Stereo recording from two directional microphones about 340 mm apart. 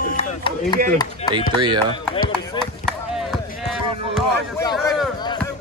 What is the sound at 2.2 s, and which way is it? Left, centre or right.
Speech, centre.